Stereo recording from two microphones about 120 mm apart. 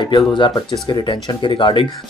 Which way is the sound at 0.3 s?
40° left (ahead or behind).